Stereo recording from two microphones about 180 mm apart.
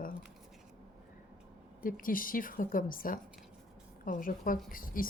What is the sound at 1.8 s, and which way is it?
Speech, 50° left (ahead or behind).